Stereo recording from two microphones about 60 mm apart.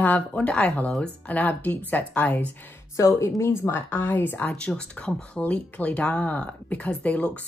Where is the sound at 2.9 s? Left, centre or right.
Left.